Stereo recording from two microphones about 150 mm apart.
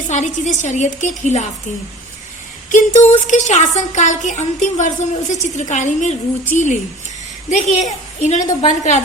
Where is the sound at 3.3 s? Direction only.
55° left (ahead or behind).